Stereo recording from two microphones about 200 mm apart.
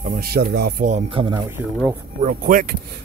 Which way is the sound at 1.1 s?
25° right (ahead or behind).